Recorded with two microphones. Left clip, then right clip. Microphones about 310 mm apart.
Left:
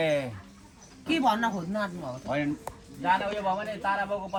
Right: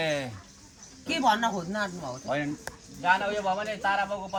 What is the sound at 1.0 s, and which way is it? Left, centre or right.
Speech, right.